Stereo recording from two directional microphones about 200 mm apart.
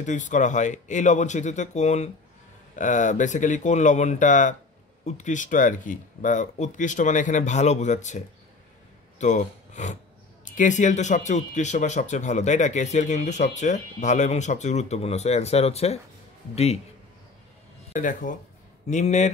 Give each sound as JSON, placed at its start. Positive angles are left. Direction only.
{"t": 0.0, "sound": "speech", "side_deg": 40}
{"t": 9.2, "sound": "speech", "side_deg": 35}
{"t": 17.9, "sound": "speech", "side_deg": 40}